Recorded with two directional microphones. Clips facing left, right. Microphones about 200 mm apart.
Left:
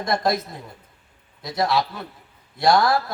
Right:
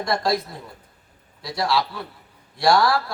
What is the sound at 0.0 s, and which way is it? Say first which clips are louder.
Speech: even; 20° left (ahead or behind).